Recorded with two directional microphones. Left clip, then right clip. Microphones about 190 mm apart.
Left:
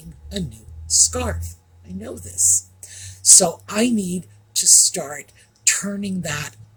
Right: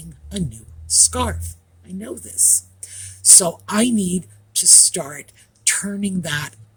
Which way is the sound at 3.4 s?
50° right (ahead or behind).